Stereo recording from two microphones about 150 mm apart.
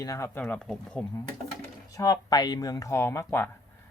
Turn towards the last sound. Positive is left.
turn(degrees=15)  # may be behind; listen again after turning